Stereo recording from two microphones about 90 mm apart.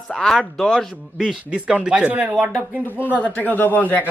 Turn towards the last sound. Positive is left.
turn(degrees=20)  # may be behind; listen again after turning